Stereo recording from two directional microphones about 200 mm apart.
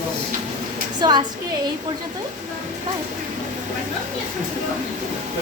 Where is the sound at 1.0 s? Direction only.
20° right (ahead or behind).